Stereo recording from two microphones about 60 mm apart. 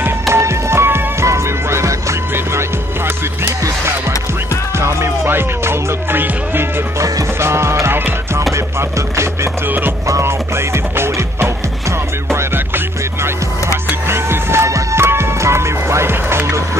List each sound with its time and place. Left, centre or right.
0.3 s music: right
1.2 s music: right
3.4 s music: right
7.3 s music: right
9.7 s music: right
10.0 s music: right
12.3 s music: right